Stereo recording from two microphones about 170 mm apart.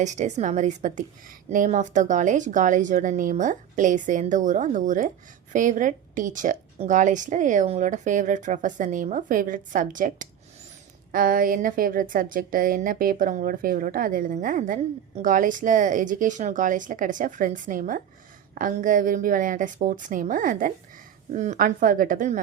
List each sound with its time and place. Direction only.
0.0 s a woman's voice: 45° right (ahead or behind)